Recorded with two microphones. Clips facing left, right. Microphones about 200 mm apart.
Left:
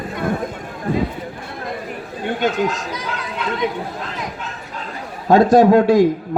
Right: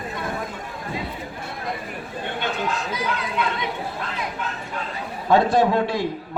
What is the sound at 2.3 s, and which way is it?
Speech, 40° left (ahead or behind).